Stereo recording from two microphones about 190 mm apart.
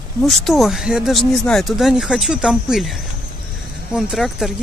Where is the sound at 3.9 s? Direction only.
5° right (ahead or behind).